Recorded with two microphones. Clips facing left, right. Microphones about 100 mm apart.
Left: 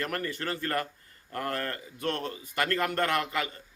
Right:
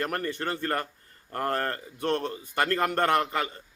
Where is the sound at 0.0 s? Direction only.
35° right (ahead or behind).